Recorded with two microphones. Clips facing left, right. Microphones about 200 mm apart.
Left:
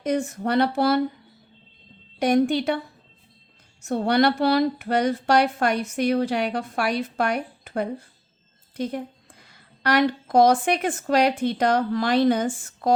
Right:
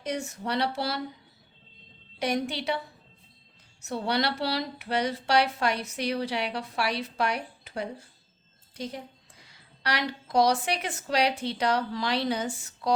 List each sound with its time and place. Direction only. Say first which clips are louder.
0.0 s speech: left 8 dB; 55° left (ahead or behind)
2.1 s a woman's voice: left 9 dB; 50° left (ahead or behind)